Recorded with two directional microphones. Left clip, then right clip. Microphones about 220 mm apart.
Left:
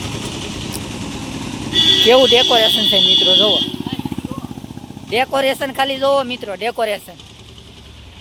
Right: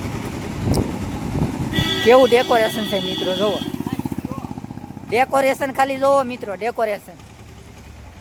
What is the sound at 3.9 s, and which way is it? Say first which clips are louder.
Vehicle: left 2 dB; 20° left (ahead or behind).